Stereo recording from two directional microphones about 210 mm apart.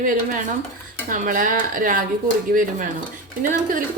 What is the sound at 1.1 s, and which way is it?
A woman's voice, 40° right (ahead or behind).